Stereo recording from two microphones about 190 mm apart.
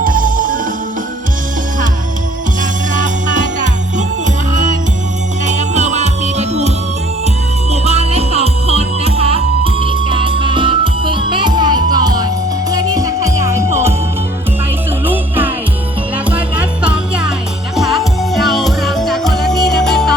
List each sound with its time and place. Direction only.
0.0 s music: 45° right (ahead or behind)
2.6 s music: 40° right (ahead or behind)
5.5 s music: 40° right (ahead or behind); by 13.9 s 15° right (ahead or behind)
15.0 s music: 10° right (ahead or behind)